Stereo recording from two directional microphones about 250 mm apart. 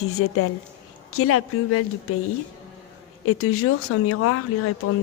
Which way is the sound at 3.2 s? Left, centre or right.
Left.